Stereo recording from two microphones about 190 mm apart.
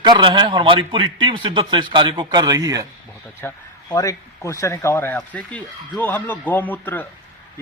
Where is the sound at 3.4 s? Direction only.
10° left (ahead or behind).